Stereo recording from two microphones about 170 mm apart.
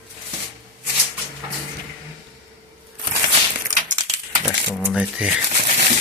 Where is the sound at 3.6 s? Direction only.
50° right (ahead or behind).